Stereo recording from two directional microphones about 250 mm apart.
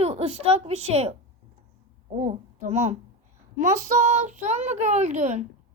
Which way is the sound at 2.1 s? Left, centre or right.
Right.